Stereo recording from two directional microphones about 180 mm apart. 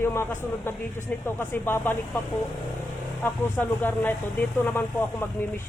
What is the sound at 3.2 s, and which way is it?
Speech, 10° left (ahead or behind).